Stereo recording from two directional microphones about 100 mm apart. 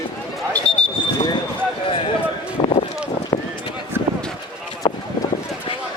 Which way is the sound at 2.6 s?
85° left.